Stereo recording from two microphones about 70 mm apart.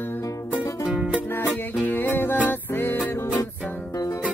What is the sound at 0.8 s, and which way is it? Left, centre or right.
Music, centre.